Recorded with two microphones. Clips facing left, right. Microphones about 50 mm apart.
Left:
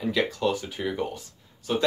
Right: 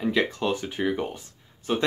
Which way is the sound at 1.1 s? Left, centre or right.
Right.